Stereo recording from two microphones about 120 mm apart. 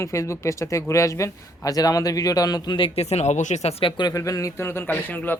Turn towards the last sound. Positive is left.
turn(degrees=15)  # may be behind; listen again after turning